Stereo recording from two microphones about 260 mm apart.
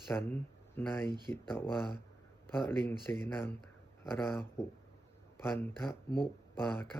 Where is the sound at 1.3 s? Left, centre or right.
Centre.